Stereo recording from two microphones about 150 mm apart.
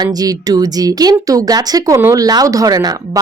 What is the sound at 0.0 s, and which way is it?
Speech, 25° right (ahead or behind).